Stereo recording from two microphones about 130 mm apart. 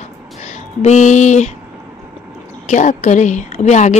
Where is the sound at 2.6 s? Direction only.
70° left (ahead or behind).